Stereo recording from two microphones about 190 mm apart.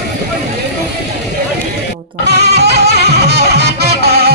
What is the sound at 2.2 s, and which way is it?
Music, 60° right (ahead or behind).